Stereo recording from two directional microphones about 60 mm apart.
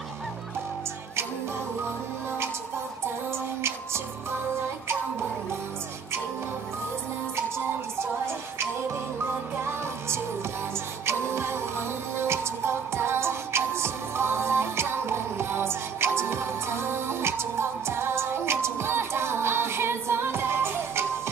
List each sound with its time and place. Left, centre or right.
3.3 s music: right
9.7 s music: right